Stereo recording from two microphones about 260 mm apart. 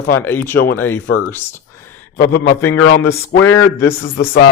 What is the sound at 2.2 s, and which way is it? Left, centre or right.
Speech, left.